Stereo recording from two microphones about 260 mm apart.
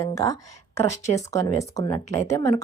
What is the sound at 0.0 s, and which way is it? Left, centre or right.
Speech, centre.